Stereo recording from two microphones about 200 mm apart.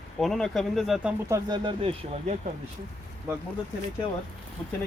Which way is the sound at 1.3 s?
20° right (ahead or behind).